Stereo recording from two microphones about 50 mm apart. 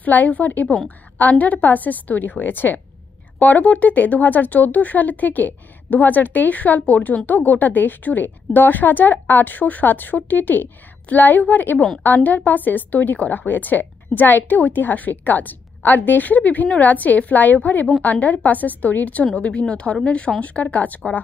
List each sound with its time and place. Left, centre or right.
0.0 s a woman's voice: left